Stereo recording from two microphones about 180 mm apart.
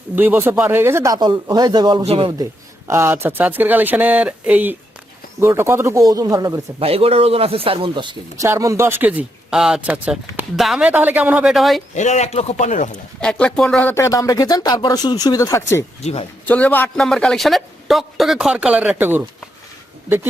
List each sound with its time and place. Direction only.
0.2 s speech: 10° right (ahead or behind); by 2.3 s 30° right (ahead or behind)
2.4 s speech: 15° right (ahead or behind)
11.9 s speech: 40° left (ahead or behind)
13.1 s speech: 5° left (ahead or behind)
16.0 s speech: 35° left (ahead or behind)
16.5 s a man's voice: 10° left (ahead or behind); by 19.2 s 10° right (ahead or behind)